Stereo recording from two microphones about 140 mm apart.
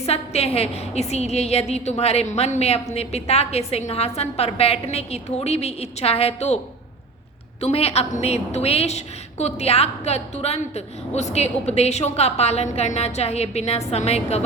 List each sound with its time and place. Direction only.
0.0 s a woman's voice: 50° left (ahead or behind)
7.6 s a woman's voice: 45° left (ahead or behind)